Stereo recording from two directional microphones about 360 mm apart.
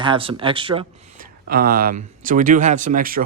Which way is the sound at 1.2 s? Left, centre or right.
Right.